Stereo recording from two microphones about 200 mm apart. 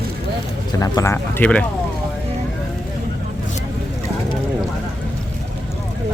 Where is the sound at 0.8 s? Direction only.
15° left (ahead or behind).